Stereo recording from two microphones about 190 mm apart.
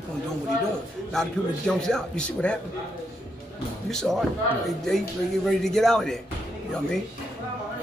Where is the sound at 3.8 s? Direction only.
Centre (ahead or behind).